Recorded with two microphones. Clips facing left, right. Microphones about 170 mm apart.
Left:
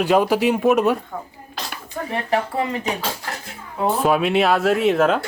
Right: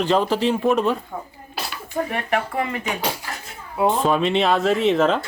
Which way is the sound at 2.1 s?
30° left (ahead or behind).